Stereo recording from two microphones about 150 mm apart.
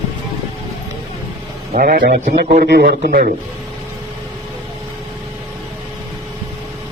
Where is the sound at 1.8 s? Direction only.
70° right (ahead or behind).